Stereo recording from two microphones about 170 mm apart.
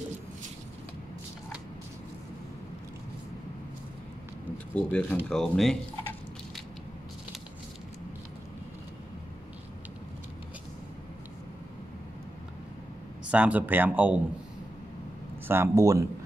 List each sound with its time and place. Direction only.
4.7 s speech: 5° left (ahead or behind)
13.3 s speech: 10° right (ahead or behind)
15.4 s speech: 15° right (ahead or behind)